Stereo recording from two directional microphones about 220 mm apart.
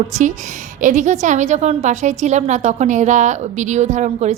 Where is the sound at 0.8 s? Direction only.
35° right (ahead or behind).